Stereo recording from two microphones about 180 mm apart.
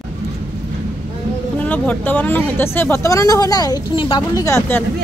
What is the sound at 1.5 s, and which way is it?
Speech, 10° left (ahead or behind).